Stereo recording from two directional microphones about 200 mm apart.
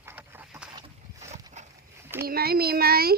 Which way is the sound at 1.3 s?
35° right (ahead or behind).